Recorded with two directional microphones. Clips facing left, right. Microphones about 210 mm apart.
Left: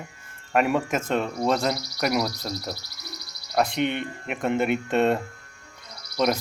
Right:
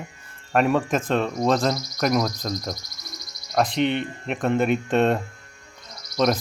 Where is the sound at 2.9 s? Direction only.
65° left (ahead or behind).